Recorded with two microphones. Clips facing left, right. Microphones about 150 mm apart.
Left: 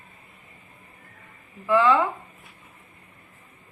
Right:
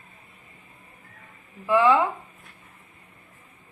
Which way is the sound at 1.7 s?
20° right (ahead or behind).